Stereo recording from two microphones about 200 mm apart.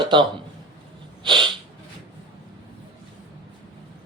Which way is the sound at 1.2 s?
25° right (ahead or behind).